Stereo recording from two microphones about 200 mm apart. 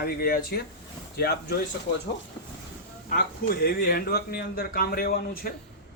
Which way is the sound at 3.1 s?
50° left (ahead or behind).